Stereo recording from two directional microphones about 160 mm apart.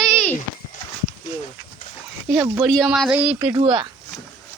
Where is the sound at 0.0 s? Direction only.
5° left (ahead or behind).